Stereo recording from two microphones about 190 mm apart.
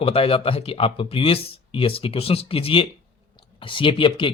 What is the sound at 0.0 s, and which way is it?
Speech, 30° left (ahead or behind).